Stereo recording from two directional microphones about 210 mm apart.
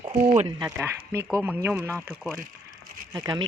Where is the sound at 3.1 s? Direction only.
20° right (ahead or behind).